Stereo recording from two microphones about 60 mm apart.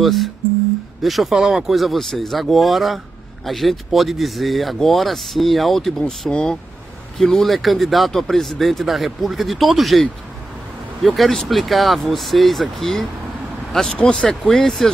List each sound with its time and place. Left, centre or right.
0.0 s speech: centre
13.9 s speech: centre
14.6 s speech: centre